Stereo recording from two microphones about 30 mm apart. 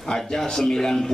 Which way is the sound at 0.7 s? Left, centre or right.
Centre.